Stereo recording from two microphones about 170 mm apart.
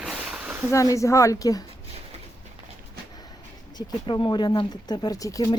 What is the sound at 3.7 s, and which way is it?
Speech, 25° left (ahead or behind).